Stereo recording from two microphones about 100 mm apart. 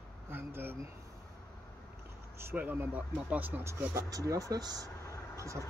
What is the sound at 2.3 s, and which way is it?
Speech, 20° right (ahead or behind).